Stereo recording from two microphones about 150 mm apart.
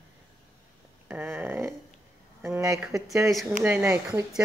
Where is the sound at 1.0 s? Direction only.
10° right (ahead or behind).